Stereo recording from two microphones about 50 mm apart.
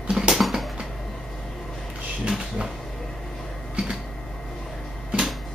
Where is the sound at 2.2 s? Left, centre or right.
Centre.